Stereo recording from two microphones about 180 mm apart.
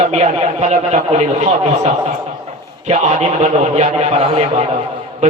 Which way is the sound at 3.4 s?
40° right (ahead or behind).